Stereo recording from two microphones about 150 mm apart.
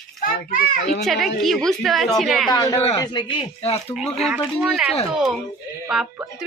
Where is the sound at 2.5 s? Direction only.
25° left (ahead or behind).